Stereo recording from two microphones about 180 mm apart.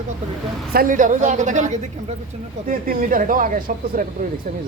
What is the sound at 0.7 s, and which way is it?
Speech, 45° right (ahead or behind).